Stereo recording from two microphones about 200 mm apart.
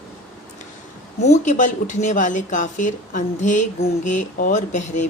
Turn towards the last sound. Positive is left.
turn(degrees=35)  # may be behind; listen again after turning